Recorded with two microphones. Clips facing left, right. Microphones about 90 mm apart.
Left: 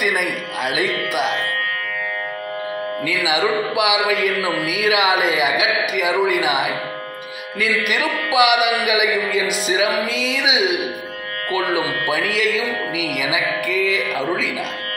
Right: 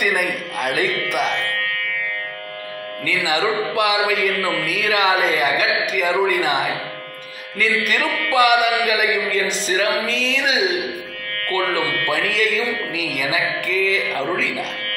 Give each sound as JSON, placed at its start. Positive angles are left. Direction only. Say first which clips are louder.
{"t": 0.0, "sound": "speech", "louder": "even", "side_deg": 5}
{"t": 3.1, "sound": "speech", "louder": "even", "side_deg": 10}
{"t": 12.1, "sound": "speech", "louder": "left 1 dB", "side_deg": 5}